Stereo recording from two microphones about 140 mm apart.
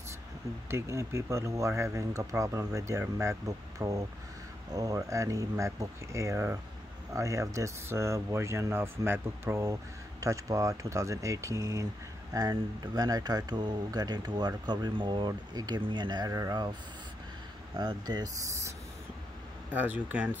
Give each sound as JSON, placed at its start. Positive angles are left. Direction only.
{"t": 0.7, "sound": "speech", "side_deg": -20}
{"t": 17.7, "sound": "speech", "side_deg": -30}
{"t": 19.7, "sound": "speech", "side_deg": -10}